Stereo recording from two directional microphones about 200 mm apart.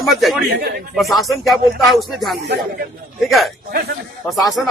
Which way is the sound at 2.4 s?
55° right (ahead or behind).